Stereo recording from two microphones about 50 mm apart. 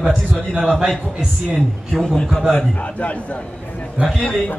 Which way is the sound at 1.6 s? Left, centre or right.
Centre.